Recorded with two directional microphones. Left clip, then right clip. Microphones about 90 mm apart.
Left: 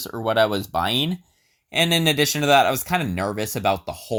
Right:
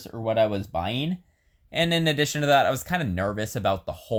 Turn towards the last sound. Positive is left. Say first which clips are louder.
# left 3 dB
turn(degrees=15)  # may be behind; listen again after turning